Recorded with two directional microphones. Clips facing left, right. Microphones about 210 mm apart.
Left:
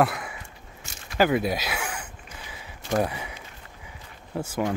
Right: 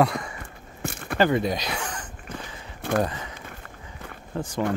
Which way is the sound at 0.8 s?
55° right (ahead or behind).